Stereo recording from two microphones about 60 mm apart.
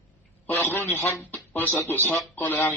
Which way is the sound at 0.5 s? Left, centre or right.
Left.